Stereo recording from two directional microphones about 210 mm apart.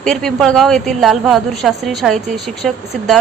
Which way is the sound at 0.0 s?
Centre (ahead or behind).